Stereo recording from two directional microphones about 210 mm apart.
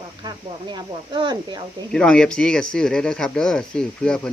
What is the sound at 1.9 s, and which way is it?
Speech, 5° left (ahead or behind).